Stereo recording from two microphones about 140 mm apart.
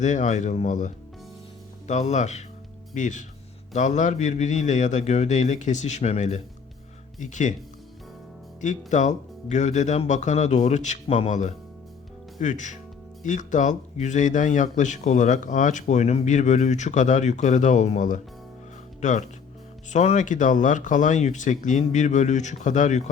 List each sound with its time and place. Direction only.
0.0 s speech: 60° left (ahead or behind)
8.6 s speech: 60° left (ahead or behind)